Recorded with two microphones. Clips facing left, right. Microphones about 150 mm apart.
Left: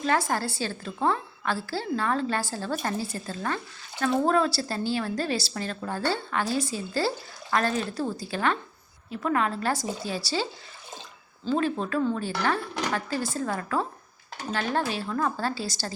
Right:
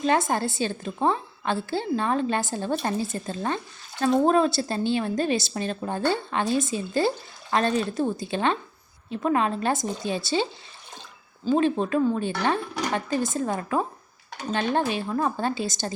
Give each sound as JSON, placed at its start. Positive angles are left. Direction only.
{"t": 0.0, "sound": "a woman's voice", "side_deg": -20}
{"t": 11.4, "sound": "a woman's voice", "side_deg": -20}